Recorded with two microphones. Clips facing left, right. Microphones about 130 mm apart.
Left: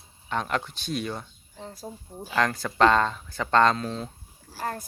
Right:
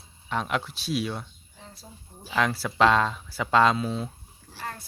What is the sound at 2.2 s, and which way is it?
Speech, 5° right (ahead or behind).